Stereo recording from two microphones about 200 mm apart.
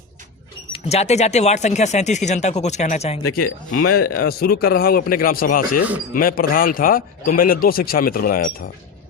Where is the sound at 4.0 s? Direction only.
50° left (ahead or behind).